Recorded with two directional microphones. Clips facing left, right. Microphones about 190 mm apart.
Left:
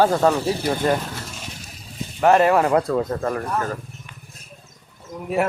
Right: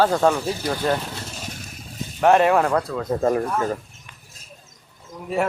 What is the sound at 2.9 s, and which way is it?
Speech, 60° left (ahead or behind).